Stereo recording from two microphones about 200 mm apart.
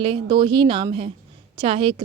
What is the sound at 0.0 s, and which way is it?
A woman's voice, 25° right (ahead or behind).